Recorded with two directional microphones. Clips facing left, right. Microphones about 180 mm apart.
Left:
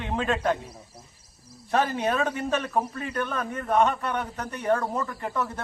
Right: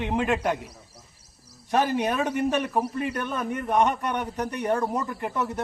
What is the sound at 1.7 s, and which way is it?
A man's voice, 15° right (ahead or behind).